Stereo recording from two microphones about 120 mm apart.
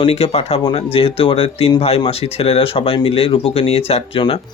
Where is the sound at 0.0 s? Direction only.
55° left (ahead or behind).